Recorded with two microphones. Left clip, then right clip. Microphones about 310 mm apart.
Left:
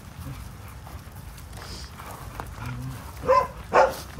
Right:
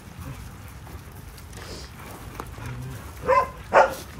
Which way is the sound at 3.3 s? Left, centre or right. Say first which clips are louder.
Right 1 dB; right.